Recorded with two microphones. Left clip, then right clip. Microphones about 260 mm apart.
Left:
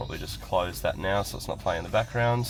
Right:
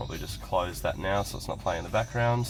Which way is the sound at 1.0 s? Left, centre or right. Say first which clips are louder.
Left 1 dB; left.